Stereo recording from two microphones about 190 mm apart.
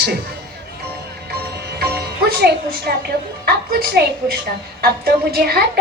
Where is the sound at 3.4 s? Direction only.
55° right (ahead or behind).